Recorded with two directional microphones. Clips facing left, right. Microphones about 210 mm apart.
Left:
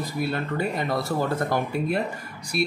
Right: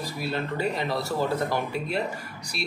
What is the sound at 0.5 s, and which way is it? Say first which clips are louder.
Speech: left 2 dB; 50° left (ahead or behind).